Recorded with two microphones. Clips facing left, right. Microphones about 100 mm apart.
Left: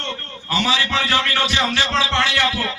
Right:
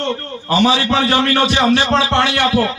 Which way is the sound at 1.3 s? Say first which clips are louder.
Right 7 dB; 15° right (ahead or behind).